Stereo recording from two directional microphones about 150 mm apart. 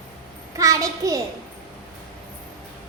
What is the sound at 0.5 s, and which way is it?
Speech, 20° right (ahead or behind).